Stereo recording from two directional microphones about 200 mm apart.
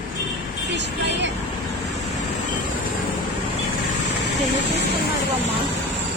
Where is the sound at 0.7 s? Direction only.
60° right (ahead or behind).